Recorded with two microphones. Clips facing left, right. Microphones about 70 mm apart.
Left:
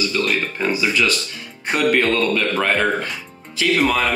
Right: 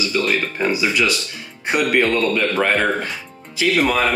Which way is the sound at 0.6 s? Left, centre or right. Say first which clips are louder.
Even; centre.